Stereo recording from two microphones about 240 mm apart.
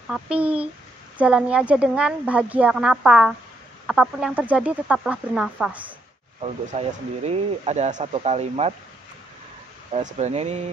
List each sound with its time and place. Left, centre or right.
0.1 s a woman's voice: centre
6.7 s speech: right
9.9 s speech: right